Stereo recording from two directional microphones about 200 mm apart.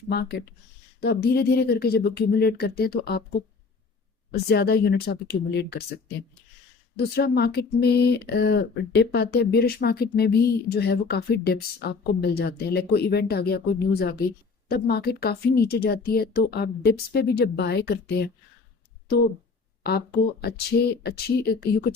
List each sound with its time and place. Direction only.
0.1 s speech: 55° left (ahead or behind)
4.4 s speech: 50° left (ahead or behind)
7.0 s speech: 50° left (ahead or behind)
20.4 s speech: 50° left (ahead or behind)